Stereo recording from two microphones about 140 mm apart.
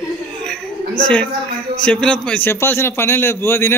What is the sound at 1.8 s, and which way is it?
A man's voice, 5° left (ahead or behind).